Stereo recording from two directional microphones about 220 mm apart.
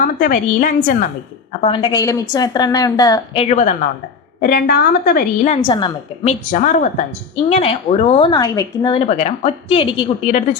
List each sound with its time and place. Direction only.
0.0 s a woman's voice: 35° left (ahead or behind)
1.6 s a woman's voice: 20° left (ahead or behind)
3.5 s a woman's voice: 35° left (ahead or behind)
5.5 s speech: 20° left (ahead or behind)
6.2 s a woman's voice: 35° left (ahead or behind)